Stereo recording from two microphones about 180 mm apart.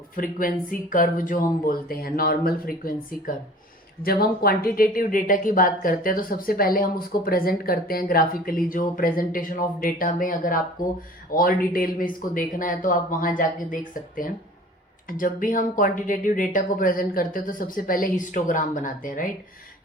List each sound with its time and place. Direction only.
0.2 s speech: 50° left (ahead or behind)
15.2 s speech: 50° left (ahead or behind)